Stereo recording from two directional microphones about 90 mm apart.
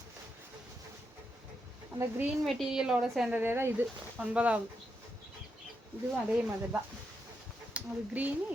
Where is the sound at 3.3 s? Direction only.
25° right (ahead or behind).